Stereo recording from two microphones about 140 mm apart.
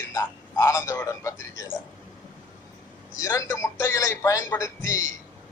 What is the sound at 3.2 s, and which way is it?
Speech, 20° left (ahead or behind).